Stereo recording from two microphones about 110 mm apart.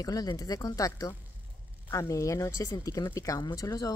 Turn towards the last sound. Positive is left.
turn(degrees=35)  # may be behind; listen again after turning